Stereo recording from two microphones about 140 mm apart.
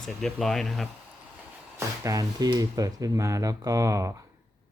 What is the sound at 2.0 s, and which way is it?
Speech, 25° right (ahead or behind).